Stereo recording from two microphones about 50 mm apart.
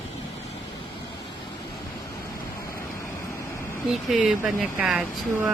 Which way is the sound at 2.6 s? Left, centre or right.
Left.